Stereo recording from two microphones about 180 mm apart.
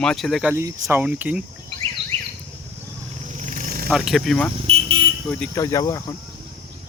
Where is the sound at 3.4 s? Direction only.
45° right (ahead or behind).